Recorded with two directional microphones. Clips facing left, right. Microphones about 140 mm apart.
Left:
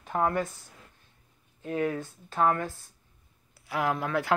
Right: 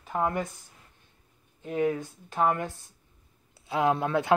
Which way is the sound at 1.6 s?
15° right (ahead or behind).